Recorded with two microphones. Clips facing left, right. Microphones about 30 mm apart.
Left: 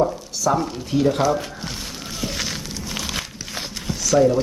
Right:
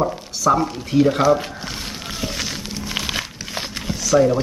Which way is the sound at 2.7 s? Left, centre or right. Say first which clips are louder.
Right 6 dB; right.